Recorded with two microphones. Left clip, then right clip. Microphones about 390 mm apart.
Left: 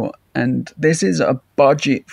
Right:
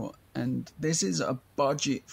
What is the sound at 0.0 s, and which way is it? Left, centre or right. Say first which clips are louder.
Speech: left 14 dB; right.